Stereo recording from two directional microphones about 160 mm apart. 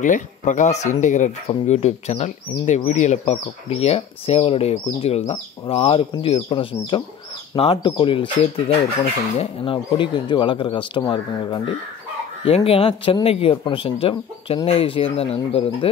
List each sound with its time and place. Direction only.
0.0 s speech: 50° left (ahead or behind); by 8.3 s 30° left (ahead or behind)
9.4 s speech: 30° left (ahead or behind)